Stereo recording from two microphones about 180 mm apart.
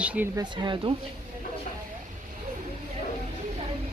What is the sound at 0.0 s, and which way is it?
Speech, 10° right (ahead or behind).